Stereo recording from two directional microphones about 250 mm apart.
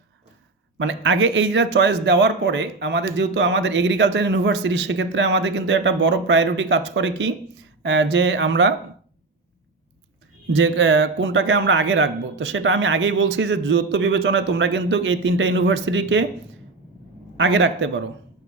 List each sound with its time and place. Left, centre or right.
0.8 s speech: right
10.5 s speech: right
17.3 s speech: right